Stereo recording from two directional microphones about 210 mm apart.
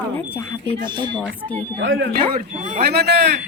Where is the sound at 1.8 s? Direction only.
60° right (ahead or behind).